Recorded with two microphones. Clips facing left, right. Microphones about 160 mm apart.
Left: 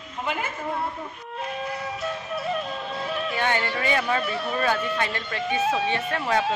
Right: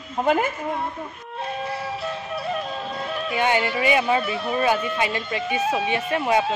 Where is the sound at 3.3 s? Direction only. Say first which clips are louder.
Right 6 dB; 15° right (ahead or behind).